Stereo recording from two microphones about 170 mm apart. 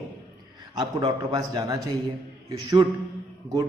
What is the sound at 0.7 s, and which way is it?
A man's voice, 25° right (ahead or behind).